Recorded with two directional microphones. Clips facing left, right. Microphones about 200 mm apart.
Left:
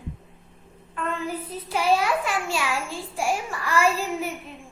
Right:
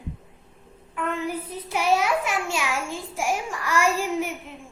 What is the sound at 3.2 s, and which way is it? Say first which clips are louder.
Speech: even; 15° right (ahead or behind).